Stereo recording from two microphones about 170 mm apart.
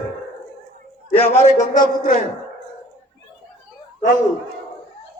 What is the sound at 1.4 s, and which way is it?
Speech, 50° left (ahead or behind).